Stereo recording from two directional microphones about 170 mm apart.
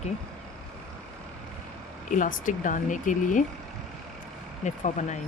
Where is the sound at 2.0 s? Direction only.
50° left (ahead or behind).